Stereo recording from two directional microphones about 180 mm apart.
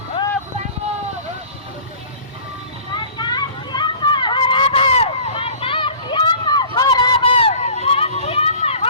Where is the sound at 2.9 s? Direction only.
25° left (ahead or behind).